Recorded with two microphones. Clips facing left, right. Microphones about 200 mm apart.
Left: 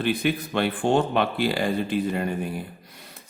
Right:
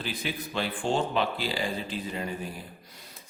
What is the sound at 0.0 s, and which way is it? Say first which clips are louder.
Speech: left 10 dB; 60° left (ahead or behind).